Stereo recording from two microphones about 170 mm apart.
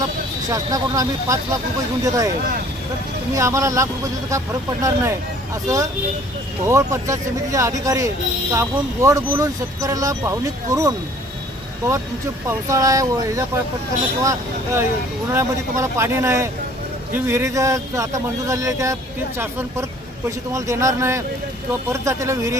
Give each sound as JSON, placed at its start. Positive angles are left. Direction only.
{"t": 0.5, "sound": "speech", "side_deg": -20}
{"t": 3.3, "sound": "speech", "side_deg": -15}
{"t": 12.5, "sound": "speech", "side_deg": -20}